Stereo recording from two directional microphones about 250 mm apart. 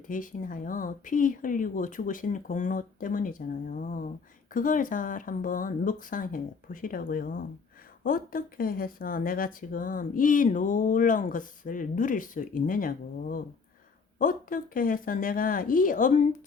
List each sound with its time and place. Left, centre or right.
0.1 s speech: left